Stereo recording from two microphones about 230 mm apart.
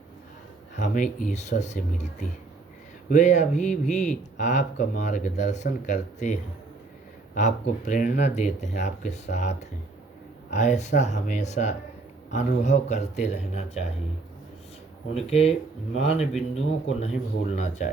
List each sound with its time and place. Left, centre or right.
0.8 s speech: left
15.1 s speech: left
16.6 s speech: left